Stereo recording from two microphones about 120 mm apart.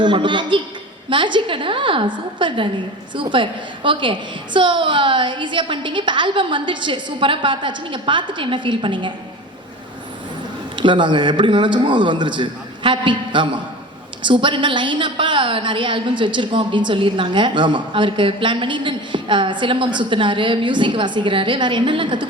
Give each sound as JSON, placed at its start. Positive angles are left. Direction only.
{"t": 0.0, "sound": "a woman's voice", "side_deg": -40}
{"t": 10.8, "sound": "a man's voice", "side_deg": -40}